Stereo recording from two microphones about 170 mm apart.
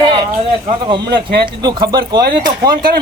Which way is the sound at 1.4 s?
25° right (ahead or behind).